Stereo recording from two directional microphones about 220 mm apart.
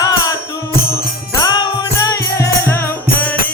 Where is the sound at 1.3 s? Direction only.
15° left (ahead or behind).